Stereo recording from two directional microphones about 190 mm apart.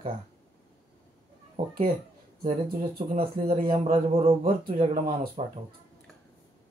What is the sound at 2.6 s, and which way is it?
Speech, 50° right (ahead or behind).